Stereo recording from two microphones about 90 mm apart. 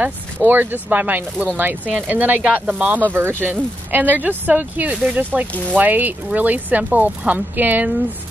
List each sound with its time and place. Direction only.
0.0 s speech: 20° right (ahead or behind)